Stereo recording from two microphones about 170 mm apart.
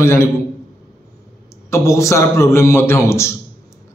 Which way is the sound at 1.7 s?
15° left (ahead or behind).